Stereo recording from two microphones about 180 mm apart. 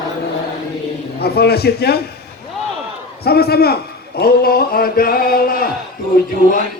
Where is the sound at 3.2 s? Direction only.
60° left (ahead or behind).